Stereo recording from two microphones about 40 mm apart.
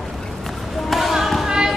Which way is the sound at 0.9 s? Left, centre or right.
Centre.